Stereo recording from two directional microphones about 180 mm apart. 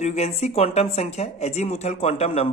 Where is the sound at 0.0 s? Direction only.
35° left (ahead or behind).